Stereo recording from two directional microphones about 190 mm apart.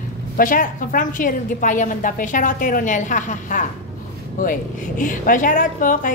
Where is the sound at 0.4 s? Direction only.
45° left (ahead or behind).